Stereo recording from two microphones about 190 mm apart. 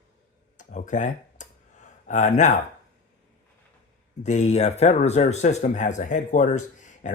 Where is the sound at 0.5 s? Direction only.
40° left (ahead or behind).